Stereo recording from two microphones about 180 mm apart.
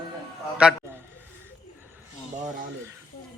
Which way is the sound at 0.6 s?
5° right (ahead or behind).